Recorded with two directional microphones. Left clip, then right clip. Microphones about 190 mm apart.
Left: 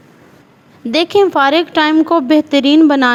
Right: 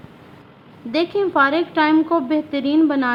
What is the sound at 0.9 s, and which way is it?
A woman's voice, 45° left (ahead or behind).